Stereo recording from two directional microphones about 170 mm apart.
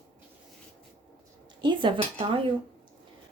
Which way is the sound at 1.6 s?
30° right (ahead or behind).